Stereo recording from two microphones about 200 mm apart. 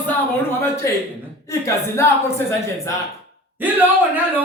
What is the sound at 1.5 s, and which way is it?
A woman's voice, 15° left (ahead or behind).